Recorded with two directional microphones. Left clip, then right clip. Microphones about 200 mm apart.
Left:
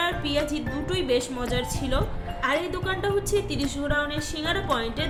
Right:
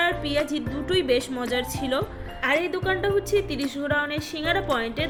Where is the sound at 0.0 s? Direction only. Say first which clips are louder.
Right 2 dB; 20° right (ahead or behind).